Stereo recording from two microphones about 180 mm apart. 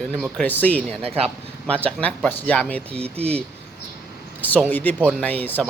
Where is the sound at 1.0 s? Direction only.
35° right (ahead or behind).